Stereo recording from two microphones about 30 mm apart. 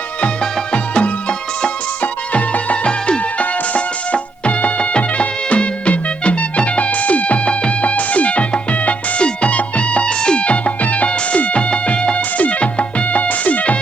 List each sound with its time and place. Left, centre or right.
0.7 s music: left
2.8 s music: left
3.8 s music: left
10.8 s music: left
12.1 s music: left